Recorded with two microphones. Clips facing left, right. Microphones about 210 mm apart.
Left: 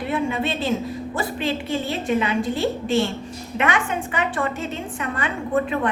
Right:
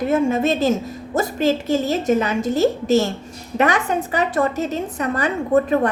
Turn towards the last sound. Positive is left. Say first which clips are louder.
# right 5 dB
turn(degrees=-40)  # may be behind; listen again after turning